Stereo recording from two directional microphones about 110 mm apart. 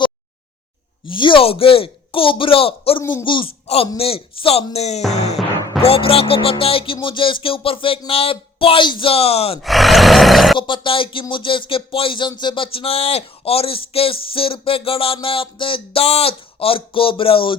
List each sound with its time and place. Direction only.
1.0 s speech: 50° left (ahead or behind)
3.0 s a woman's voice: 25° left (ahead or behind)
3.2 s speech: 50° left (ahead or behind)
4.7 s speech: 85° left
5.1 s music: 90° left
5.8 s speech: 60° left (ahead or behind)
9.6 s roar: centre (ahead or behind)
10.6 s speech: 50° left (ahead or behind)